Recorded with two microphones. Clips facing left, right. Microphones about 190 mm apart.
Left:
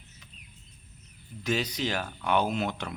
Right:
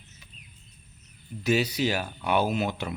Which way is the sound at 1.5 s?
10° right (ahead or behind).